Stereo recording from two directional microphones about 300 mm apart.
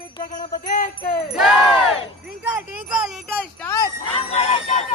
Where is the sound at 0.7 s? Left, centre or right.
Left.